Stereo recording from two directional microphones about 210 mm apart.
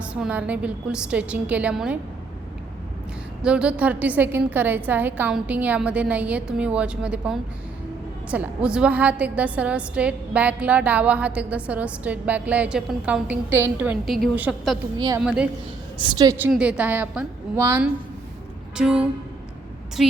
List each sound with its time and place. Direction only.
0.0 s a woman's voice: 5° right (ahead or behind)
3.4 s a woman's voice: 5° right (ahead or behind)
14.9 s a woman's voice: 20° right (ahead or behind)
15.2 s a woman's voice: 5° right (ahead or behind)
16.0 s a woman's voice: 20° right (ahead or behind)
16.5 s a woman's voice: 5° right (ahead or behind)